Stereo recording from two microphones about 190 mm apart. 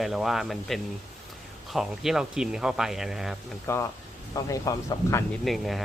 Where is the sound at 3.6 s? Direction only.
15° left (ahead or behind).